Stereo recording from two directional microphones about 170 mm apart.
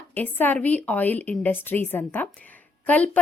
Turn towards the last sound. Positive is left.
turn(degrees=10)  # may be behind; listen again after turning